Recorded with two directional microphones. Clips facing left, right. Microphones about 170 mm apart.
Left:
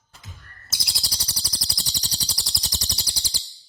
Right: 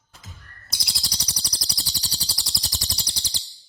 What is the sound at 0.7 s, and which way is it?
Bird, centre (ahead or behind).